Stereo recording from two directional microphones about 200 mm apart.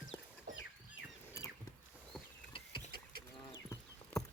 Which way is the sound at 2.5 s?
25° left (ahead or behind).